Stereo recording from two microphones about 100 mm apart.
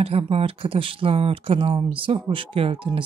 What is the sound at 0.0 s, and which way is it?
Speech, 85° right.